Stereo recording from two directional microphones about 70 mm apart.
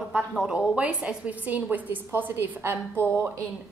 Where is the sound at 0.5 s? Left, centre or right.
Centre.